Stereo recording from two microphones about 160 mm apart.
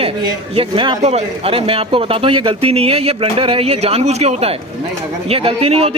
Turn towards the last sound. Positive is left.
turn(degrees=-40)  # may be behind; listen again after turning